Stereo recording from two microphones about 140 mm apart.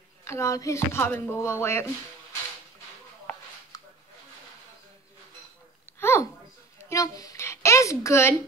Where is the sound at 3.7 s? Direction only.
25° left (ahead or behind).